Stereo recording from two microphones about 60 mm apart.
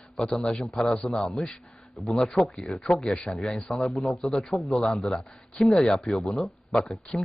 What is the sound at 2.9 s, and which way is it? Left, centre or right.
Speech, centre.